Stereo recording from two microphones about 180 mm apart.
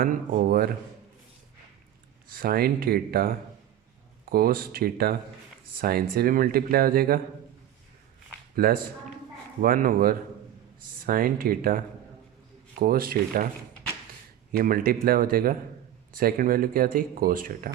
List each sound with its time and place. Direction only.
0.0 s speech: 50° right (ahead or behind)
2.3 s speech: 55° right (ahead or behind)
8.5 s a man's voice: 55° right (ahead or behind)
12.8 s speech: 55° right (ahead or behind)
14.5 s speech: 55° right (ahead or behind)